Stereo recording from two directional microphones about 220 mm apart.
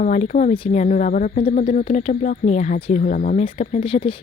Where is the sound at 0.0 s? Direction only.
35° left (ahead or behind).